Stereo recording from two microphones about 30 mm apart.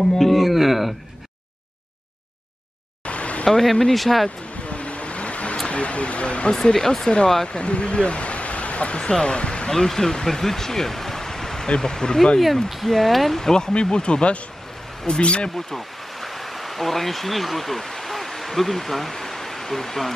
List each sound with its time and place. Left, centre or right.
0.2 s a sound: centre
3.1 s a sound: left
3.9 s speech: centre
4.6 s vehicle: left
5.7 s speech: left
6.5 s speech: centre
7.4 s speech: left
9.7 s speech: centre
12.8 s speech: centre
13.5 s speech: left
13.7 s speech: left
15.5 s stream: centre
18.1 s a sound: centre